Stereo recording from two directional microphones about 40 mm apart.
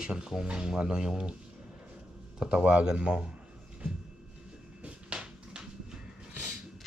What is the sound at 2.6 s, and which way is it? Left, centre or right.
Speech, right.